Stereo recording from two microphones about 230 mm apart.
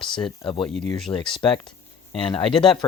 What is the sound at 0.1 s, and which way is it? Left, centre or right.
Speech, left.